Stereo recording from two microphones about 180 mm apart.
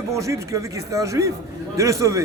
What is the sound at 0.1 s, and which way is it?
A man's voice, 15° right (ahead or behind).